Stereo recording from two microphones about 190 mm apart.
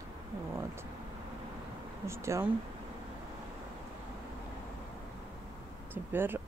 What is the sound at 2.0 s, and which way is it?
Speech, 15° right (ahead or behind).